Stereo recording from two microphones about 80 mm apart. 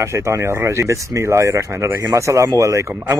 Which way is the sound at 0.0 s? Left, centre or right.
Right.